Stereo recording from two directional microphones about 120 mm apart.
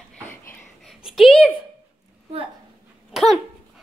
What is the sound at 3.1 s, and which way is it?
Dog, centre (ahead or behind).